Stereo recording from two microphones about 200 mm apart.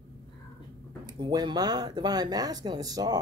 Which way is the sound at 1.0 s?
20° right (ahead or behind).